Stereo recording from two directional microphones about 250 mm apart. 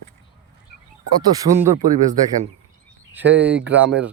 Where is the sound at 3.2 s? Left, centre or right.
Right.